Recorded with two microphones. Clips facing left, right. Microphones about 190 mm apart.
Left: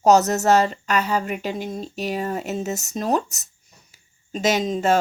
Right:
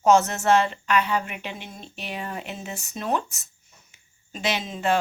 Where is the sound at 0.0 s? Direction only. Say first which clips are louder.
Left 3 dB; 40° left (ahead or behind).